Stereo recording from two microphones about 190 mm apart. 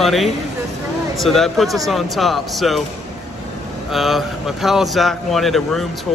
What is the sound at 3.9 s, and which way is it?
Speech, centre (ahead or behind).